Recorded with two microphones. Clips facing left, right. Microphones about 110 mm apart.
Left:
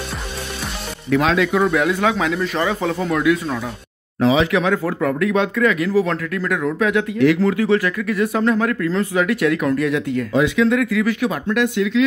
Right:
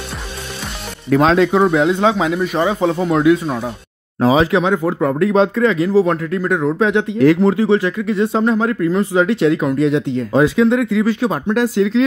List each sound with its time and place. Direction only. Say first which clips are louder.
1.1 s speech: right 4 dB; 35° right (ahead or behind)
4.2 s speech: right 3 dB; 40° right (ahead or behind)
4.5 s speech: right 3 dB; 25° right (ahead or behind)
10.3 s speech: right 4 dB; 35° right (ahead or behind)